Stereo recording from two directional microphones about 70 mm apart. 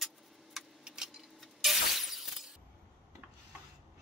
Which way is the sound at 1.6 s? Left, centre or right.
Centre.